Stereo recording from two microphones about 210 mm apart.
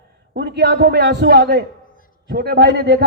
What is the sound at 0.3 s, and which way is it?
A man's voice, 55° right (ahead or behind).